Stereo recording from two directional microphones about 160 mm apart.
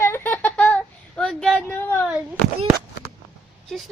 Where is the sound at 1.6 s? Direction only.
15° left (ahead or behind).